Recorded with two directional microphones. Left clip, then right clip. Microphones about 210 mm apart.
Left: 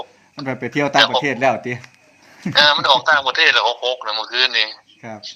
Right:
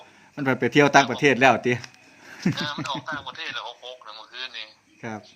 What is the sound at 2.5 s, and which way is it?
A man's voice, 55° left (ahead or behind).